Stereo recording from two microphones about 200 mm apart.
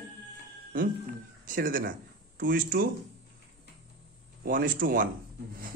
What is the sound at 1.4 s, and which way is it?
A man's voice, 45° right (ahead or behind).